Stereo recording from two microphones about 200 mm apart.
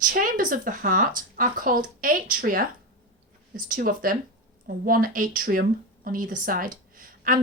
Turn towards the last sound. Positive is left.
turn(degrees=-45)  # may be behind; listen again after turning